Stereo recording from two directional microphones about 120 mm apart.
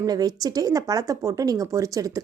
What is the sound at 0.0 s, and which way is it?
Speech, 30° right (ahead or behind).